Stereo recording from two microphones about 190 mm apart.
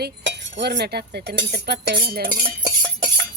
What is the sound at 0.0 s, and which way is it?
Cutlery, 70° right (ahead or behind).